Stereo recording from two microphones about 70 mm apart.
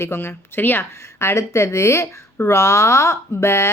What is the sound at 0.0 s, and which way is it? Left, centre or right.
Speech, left.